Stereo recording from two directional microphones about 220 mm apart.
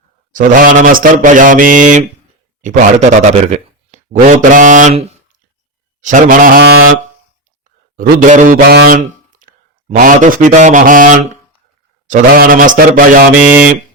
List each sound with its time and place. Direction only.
0.3 s mantra: 40° right (ahead or behind)
2.6 s speech: 35° right (ahead or behind)
6.0 s mantra: 35° right (ahead or behind)